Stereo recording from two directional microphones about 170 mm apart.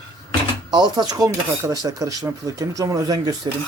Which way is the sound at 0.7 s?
25° right (ahead or behind).